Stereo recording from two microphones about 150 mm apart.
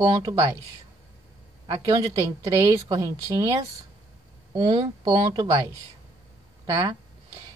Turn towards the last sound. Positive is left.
turn(degrees=-25)  # may be behind; listen again after turning